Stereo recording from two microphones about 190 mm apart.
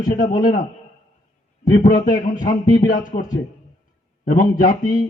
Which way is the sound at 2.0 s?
45° left (ahead or behind).